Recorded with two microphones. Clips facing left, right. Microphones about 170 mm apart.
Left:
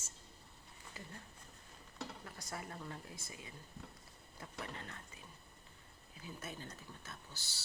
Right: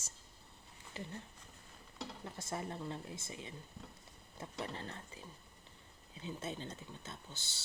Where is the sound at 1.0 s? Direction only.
25° right (ahead or behind).